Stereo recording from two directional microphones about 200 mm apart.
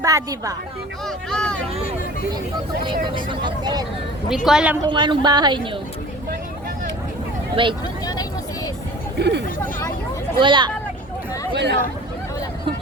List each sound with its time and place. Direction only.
0.0 s speech: 15° right (ahead or behind)
1.0 s speech: 5° left (ahead or behind)
2.8 s speech: 25° right (ahead or behind)
4.4 s speech: 5° right (ahead or behind)
4.8 s speech: 25° right (ahead or behind)
7.5 s speech: 25° right (ahead or behind)
8.0 s vehicle: 20° left (ahead or behind)
9.1 s speech: 55° right (ahead or behind)
10.4 s speech: 25° right (ahead or behind)
11.5 s speech: 60° right (ahead or behind)